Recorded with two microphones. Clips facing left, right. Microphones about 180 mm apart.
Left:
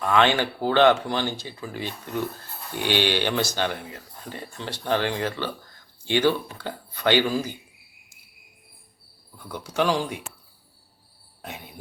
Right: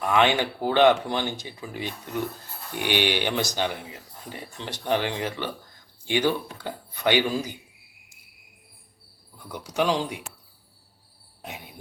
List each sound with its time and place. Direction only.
0.0 s speech: 15° right (ahead or behind)
9.5 s speech: 15° right (ahead or behind)
11.4 s speech: 20° right (ahead or behind)